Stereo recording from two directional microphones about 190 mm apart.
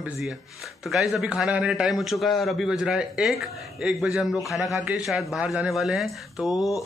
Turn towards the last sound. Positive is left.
turn(degrees=0)  # may be behind; listen again after turning